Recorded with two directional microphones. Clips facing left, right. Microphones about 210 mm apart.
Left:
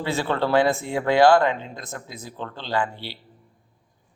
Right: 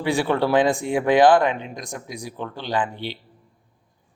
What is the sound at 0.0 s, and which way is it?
A man's voice, 15° right (ahead or behind).